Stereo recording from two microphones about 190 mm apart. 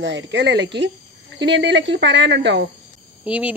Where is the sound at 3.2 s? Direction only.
5° right (ahead or behind).